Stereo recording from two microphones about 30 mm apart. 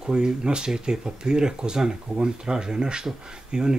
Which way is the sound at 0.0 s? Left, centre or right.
Right.